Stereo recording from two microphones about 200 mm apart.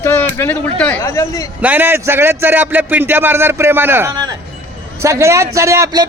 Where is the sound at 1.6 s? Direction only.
10° right (ahead or behind).